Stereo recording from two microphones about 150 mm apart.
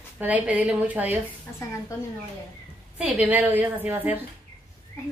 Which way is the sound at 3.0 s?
10° right (ahead or behind).